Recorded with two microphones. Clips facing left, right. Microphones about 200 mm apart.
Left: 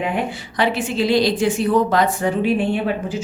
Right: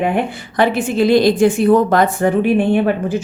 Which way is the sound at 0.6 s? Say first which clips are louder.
Right 5 dB; 50° right (ahead or behind).